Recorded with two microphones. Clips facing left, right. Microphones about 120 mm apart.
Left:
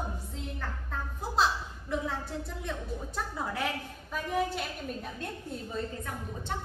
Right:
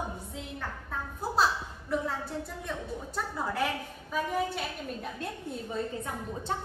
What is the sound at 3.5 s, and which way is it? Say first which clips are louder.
A woman's voice: right 2 dB; centre (ahead or behind).